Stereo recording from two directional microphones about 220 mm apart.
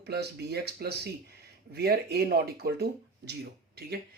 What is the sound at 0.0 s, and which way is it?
Speech, 45° right (ahead or behind).